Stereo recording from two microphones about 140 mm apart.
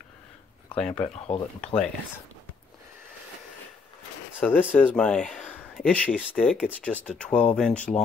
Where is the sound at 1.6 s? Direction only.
5° left (ahead or behind).